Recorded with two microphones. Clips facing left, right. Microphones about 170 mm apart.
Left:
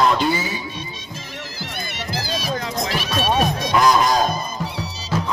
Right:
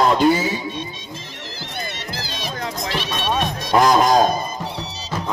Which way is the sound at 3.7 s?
45° right (ahead or behind).